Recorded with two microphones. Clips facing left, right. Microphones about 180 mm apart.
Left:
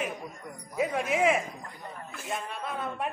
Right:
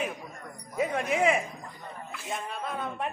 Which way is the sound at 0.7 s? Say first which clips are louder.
Even; centre (ahead or behind).